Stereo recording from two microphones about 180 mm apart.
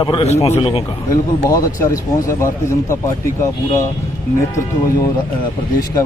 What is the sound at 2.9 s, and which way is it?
Speech, 15° left (ahead or behind).